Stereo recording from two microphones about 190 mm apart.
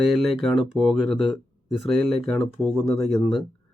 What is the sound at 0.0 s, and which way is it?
Speech, centre (ahead or behind).